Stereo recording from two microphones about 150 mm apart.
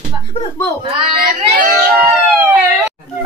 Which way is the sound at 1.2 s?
65° right (ahead or behind).